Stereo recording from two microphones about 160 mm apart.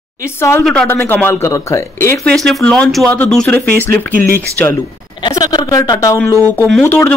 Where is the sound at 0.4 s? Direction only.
15° left (ahead or behind).